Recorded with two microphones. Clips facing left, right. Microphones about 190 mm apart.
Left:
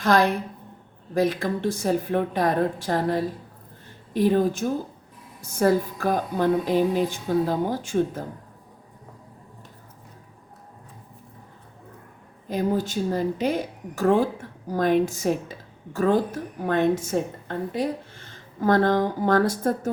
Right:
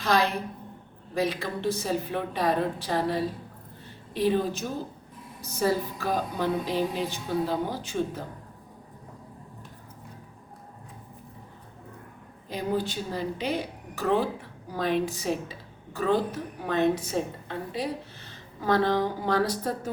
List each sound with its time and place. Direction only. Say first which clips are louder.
0.0 s a woman's voice: left 5 dB; 50° left (ahead or behind)
12.5 s speech: left 4 dB; 45° left (ahead or behind)